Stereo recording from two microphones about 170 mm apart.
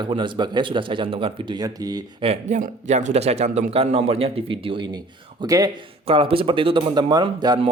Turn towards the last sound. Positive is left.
turn(degrees=-30)  # may be behind; listen again after turning